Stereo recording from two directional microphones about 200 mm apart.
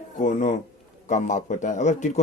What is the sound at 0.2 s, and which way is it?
Speech, 40° left (ahead or behind).